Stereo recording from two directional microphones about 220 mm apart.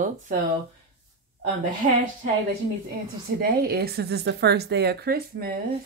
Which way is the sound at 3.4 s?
45° right (ahead or behind).